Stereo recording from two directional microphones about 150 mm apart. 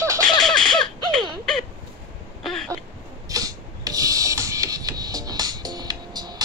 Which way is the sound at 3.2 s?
25° right (ahead or behind).